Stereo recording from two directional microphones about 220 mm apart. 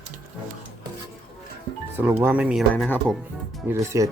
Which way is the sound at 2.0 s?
10° right (ahead or behind).